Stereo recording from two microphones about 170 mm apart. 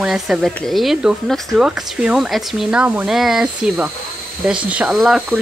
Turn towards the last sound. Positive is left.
turn(degrees=0)  # may be behind; listen again after turning